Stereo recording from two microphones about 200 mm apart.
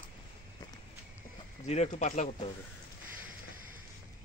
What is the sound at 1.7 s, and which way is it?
Speech, 35° left (ahead or behind).